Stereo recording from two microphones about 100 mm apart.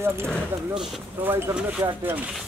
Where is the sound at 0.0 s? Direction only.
25° right (ahead or behind).